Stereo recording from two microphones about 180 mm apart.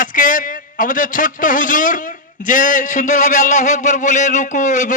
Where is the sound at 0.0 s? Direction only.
45° left (ahead or behind).